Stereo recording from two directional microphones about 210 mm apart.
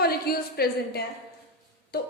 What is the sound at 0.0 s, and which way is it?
A woman's voice, 45° left (ahead or behind).